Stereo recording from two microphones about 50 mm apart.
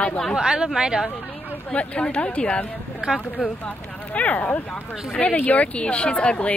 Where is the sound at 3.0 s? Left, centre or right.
Right.